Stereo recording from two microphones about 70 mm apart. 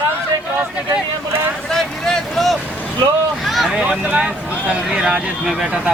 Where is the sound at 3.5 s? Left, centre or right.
Centre.